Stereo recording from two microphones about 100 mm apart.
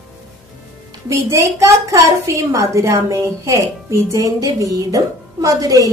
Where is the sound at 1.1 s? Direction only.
30° right (ahead or behind).